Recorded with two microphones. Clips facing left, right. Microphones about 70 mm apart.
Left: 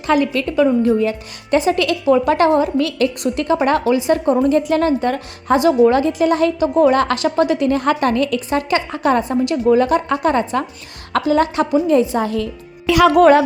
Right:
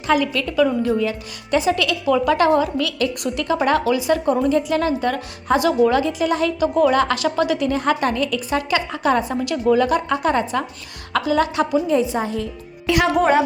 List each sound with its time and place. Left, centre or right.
0.1 s a woman's voice: left
4.4 s a woman's voice: left
11.9 s a woman's voice: left